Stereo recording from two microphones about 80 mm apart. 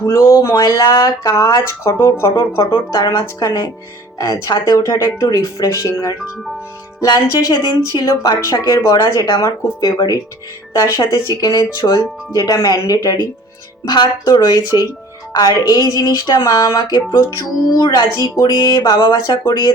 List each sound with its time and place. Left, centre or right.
0.0 s a sound: left
0.5 s speech: left
1.8 s speech: left
2.6 s a woman's voice: left
11.1 s a woman's voice: left